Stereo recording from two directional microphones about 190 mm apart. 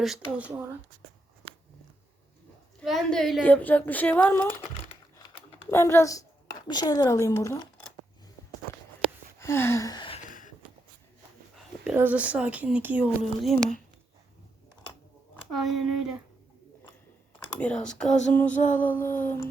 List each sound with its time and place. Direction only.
0.0 s speech: 5° right (ahead or behind)
2.8 s speech: centre (ahead or behind)
5.7 s a woman's voice: 15° left (ahead or behind)
9.4 s a sound: 15° left (ahead or behind)
10.2 s a sound: 45° left (ahead or behind)
11.9 s speech: 10° right (ahead or behind)
13.2 s speech: centre (ahead or behind)
15.5 s speech: centre (ahead or behind)
17.6 s speech: 5° left (ahead or behind)
18.5 s music: 40° left (ahead or behind)
18.8 s speech: 10° left (ahead or behind)